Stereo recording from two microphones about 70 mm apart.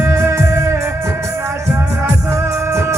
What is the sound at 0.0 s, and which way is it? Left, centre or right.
Music, right.